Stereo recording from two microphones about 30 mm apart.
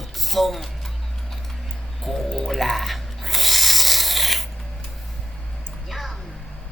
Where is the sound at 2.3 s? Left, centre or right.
Centre.